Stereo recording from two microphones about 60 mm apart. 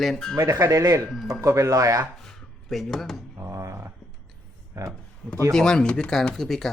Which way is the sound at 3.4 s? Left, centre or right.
Right.